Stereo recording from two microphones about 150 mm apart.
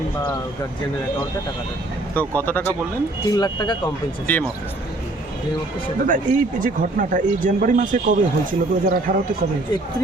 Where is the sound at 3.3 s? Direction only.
25° left (ahead or behind).